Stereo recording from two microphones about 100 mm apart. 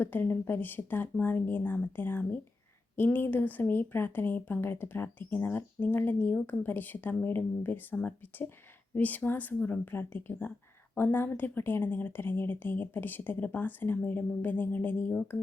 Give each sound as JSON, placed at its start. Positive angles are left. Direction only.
{"t": 0.0, "sound": "a woman's voice", "side_deg": 20}